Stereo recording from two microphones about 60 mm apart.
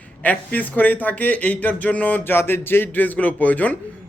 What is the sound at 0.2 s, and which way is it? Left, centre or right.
A man's voice, left.